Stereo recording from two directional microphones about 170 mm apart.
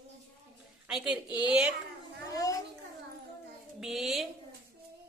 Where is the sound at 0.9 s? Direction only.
5° right (ahead or behind).